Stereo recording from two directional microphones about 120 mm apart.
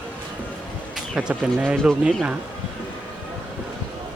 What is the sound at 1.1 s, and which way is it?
Speech, 10° right (ahead or behind).